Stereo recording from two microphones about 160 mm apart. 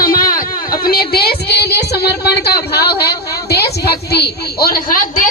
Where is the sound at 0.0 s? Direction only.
65° left (ahead or behind).